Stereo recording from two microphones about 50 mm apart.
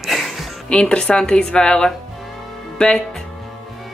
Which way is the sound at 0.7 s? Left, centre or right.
Centre.